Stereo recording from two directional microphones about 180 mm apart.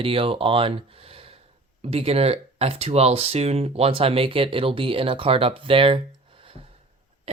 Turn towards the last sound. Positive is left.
turn(degrees=-30)  # may be behind; listen again after turning